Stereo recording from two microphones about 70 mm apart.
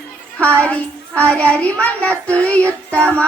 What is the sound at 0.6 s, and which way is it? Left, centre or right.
Speech, centre.